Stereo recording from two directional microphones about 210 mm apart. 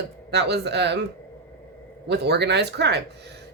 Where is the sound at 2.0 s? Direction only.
55° right (ahead or behind).